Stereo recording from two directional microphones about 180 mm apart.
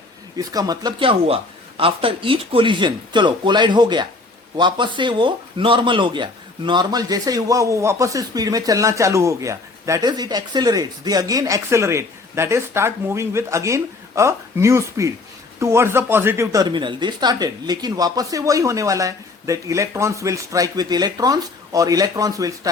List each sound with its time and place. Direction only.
0.3 s a man's voice: 20° right (ahead or behind)